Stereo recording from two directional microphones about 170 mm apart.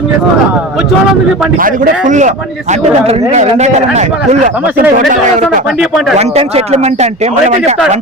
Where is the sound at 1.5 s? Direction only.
55° right (ahead or behind).